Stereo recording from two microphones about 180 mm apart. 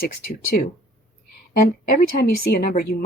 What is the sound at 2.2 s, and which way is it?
Speech, 60° left (ahead or behind).